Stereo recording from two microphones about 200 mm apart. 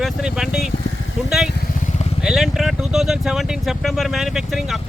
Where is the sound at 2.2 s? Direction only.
Centre (ahead or behind).